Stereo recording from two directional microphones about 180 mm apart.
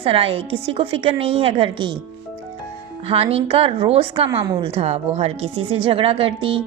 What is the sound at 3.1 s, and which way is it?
A woman's voice, 35° right (ahead or behind).